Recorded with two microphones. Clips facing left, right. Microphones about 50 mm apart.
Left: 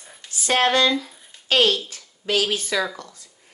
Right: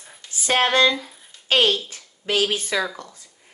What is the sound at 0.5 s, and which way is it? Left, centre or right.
Speech, right.